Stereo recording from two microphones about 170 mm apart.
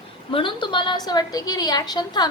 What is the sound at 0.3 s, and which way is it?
A woman's voice, 30° left (ahead or behind).